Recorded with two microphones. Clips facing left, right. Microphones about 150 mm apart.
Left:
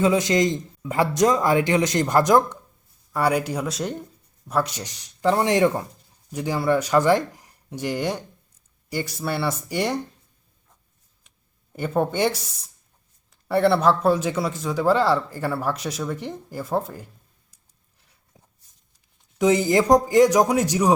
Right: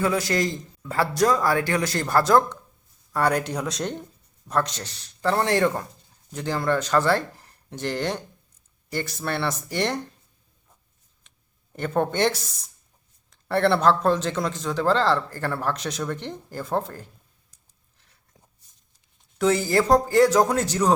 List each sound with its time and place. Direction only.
0.0 s a man's voice: 20° left (ahead or behind)
11.8 s a man's voice: 10° left (ahead or behind)
19.4 s a man's voice: 15° left (ahead or behind)